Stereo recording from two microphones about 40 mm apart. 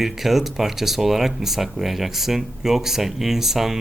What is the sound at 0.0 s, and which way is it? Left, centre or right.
Speech, centre.